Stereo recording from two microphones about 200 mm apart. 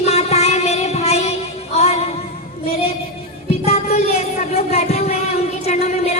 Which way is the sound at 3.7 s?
30° left (ahead or behind).